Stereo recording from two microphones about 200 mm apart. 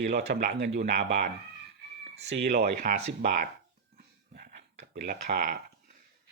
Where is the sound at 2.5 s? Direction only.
50° right (ahead or behind).